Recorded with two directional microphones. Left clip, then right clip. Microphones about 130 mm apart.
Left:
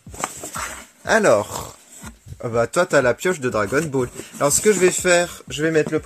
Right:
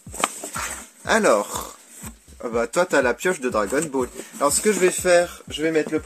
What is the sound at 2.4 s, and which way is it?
Speech, 20° left (ahead or behind).